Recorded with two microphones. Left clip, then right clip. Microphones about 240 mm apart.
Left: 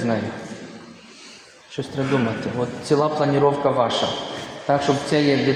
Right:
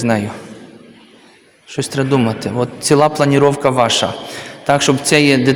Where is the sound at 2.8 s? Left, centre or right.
Right.